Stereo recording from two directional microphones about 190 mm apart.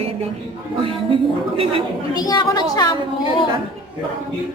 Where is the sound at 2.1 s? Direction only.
20° left (ahead or behind).